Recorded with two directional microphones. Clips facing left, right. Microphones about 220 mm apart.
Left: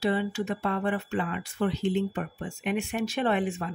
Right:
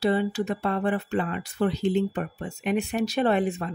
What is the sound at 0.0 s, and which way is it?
A woman's voice, 35° right (ahead or behind).